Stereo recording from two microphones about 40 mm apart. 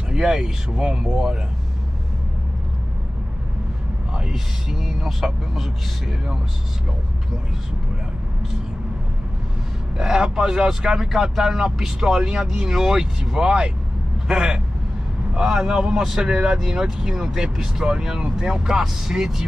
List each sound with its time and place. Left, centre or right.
0.1 s speech: centre
4.3 s speech: centre
9.9 s a man's voice: centre
16.3 s a man's voice: right
16.6 s speech: centre